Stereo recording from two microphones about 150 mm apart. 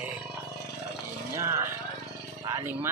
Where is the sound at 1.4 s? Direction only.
20° right (ahead or behind).